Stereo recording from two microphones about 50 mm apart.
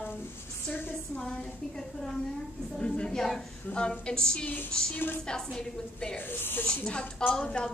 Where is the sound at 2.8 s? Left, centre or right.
Centre.